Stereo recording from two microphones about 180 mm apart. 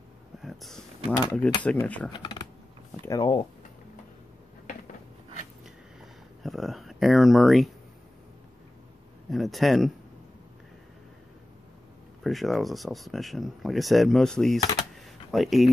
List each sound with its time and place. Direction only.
0.4 s speech: centre (ahead or behind)
2.1 s typing: 25° left (ahead or behind)
3.1 s speech: 25° left (ahead or behind)
5.9 s a sound: centre (ahead or behind)
9.3 s speech: centre (ahead or behind)
12.2 s speech: centre (ahead or behind)